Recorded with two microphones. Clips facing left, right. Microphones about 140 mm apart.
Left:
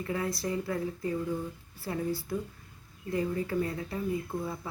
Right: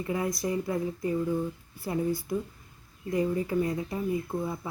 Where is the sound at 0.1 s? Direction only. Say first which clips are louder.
Right 3 dB; 15° right (ahead or behind).